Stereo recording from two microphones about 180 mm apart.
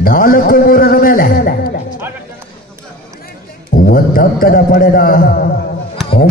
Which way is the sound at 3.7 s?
50° left (ahead or behind).